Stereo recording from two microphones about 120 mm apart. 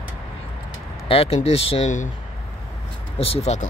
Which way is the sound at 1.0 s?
55° left (ahead or behind).